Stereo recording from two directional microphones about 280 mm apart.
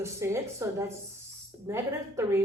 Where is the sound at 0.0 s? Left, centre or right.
Centre.